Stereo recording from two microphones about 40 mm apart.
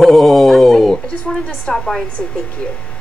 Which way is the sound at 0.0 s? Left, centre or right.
Centre.